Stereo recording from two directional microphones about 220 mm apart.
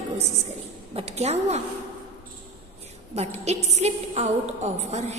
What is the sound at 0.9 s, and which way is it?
Speech, 30° right (ahead or behind).